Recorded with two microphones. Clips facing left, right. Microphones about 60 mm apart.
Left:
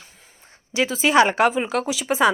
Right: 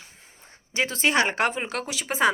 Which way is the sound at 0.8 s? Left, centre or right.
Centre.